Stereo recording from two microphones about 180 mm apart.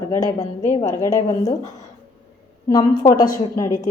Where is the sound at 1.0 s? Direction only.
15° left (ahead or behind).